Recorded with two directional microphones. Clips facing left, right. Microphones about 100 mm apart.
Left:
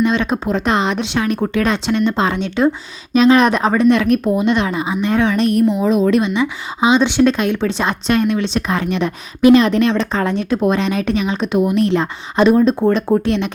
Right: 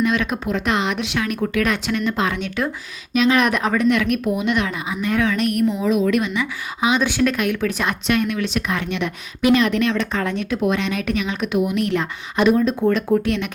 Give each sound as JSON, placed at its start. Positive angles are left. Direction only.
{"t": 0.0, "sound": "speech", "side_deg": 30}